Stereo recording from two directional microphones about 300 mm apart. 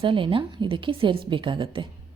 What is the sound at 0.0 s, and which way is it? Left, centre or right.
A woman's voice, centre.